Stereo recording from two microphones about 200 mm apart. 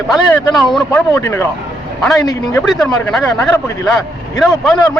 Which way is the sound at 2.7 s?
5° left (ahead or behind).